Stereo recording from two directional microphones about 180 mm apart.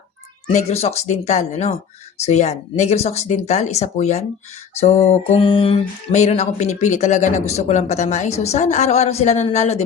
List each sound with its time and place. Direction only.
0.4 s speech: 35° left (ahead or behind)